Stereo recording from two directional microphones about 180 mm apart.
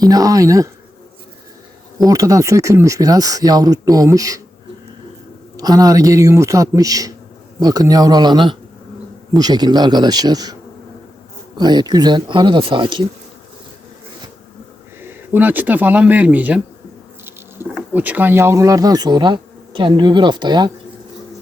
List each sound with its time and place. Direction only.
0.0 s bee: 20° right (ahead or behind)
2.0 s bee: 20° right (ahead or behind)
5.5 s bee: 20° right (ahead or behind)
15.0 s speech: 10° right (ahead or behind)
17.7 s bee: 10° right (ahead or behind); by 20.7 s 25° right (ahead or behind)